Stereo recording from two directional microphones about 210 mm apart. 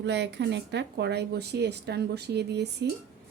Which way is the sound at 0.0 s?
55° right (ahead or behind).